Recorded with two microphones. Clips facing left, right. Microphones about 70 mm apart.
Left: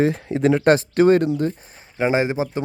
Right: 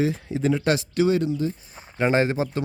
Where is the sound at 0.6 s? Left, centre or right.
Left.